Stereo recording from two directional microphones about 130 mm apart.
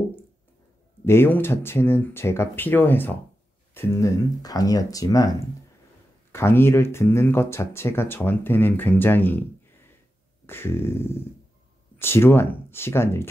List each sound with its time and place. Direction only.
1.0 s speech: 15° left (ahead or behind)
6.3 s speech: 20° left (ahead or behind)
10.4 s speech: 20° left (ahead or behind)